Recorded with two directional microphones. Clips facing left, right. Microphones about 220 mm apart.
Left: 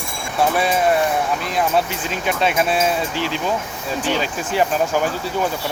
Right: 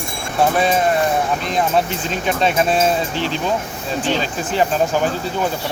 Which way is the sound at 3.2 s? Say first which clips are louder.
Right 1 dB; 10° left (ahead or behind).